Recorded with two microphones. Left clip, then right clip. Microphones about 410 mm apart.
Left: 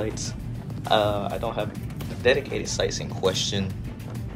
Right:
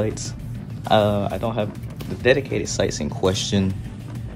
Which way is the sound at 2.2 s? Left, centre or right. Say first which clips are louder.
Right 3 dB; centre.